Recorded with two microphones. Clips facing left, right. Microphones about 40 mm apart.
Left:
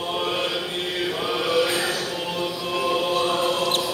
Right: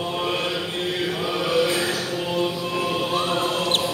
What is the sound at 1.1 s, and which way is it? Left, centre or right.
Choir, centre.